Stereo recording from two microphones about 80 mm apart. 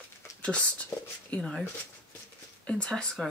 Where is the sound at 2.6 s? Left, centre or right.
Centre.